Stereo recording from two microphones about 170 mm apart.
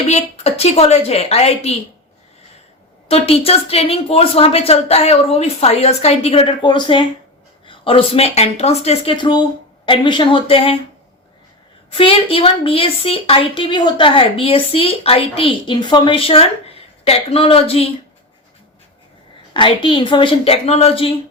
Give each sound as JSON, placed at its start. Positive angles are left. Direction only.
{"t": 0.1, "sound": "a woman's voice", "side_deg": 40}
{"t": 3.1, "sound": "a woman's voice", "side_deg": 35}
{"t": 11.9, "sound": "a woman's voice", "side_deg": 35}
{"t": 19.5, "sound": "a woman's voice", "side_deg": 30}